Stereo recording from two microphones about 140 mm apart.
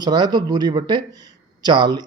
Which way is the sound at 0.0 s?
30° right (ahead or behind).